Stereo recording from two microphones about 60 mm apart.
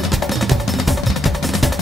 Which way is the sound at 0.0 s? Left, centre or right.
Centre.